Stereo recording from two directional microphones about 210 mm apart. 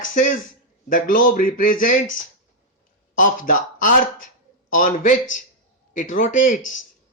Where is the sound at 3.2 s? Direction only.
40° left (ahead or behind).